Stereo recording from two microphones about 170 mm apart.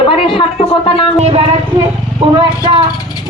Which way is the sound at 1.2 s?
35° right (ahead or behind).